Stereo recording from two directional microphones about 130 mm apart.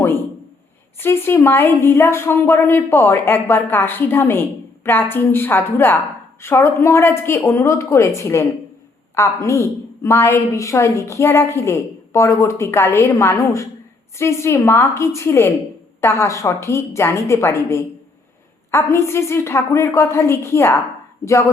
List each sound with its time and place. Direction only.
0.9 s a woman's voice: 20° left (ahead or behind)